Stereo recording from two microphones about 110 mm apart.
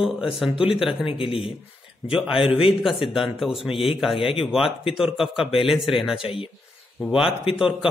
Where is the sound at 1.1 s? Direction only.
55° left (ahead or behind).